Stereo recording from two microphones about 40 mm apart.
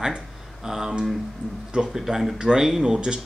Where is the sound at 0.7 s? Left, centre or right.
Centre.